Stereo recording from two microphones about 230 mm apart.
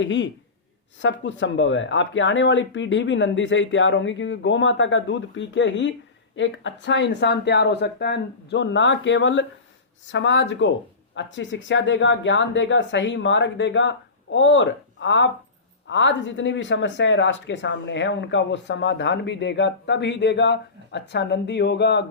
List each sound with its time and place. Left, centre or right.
0.0 s speech: left